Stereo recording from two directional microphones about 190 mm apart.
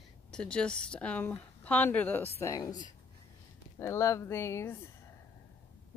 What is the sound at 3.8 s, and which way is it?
Speech, 15° left (ahead or behind).